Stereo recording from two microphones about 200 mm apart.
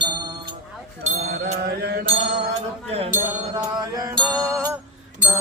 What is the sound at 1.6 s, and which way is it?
Mantra, 55° right (ahead or behind).